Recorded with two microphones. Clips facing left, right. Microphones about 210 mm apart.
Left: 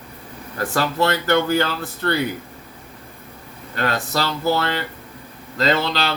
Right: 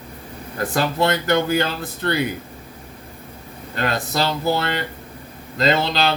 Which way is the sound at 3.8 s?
15° right (ahead or behind).